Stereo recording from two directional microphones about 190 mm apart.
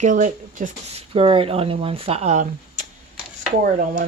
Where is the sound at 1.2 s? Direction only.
30° right (ahead or behind).